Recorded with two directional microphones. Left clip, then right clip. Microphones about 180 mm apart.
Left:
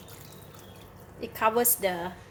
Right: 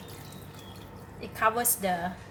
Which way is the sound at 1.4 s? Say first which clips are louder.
Left 2 dB; 45° left (ahead or behind).